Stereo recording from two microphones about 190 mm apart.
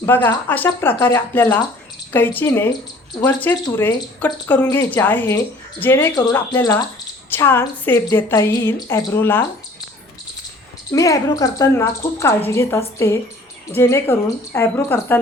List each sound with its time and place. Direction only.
0.0 s a woman's voice: 10° left (ahead or behind)
10.9 s a woman's voice: 15° left (ahead or behind)